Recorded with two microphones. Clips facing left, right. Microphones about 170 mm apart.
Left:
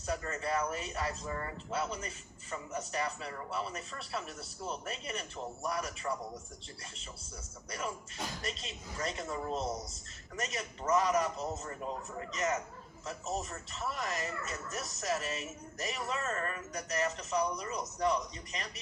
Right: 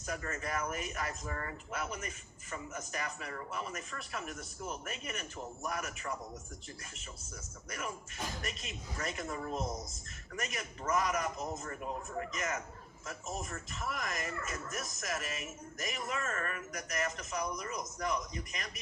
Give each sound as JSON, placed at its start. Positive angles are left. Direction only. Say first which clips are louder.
{"t": 0.0, "sound": "speech", "louder": "left 3 dB", "side_deg": 30}
{"t": 7.7, "sound": "speech", "louder": "left 2 dB", "side_deg": 30}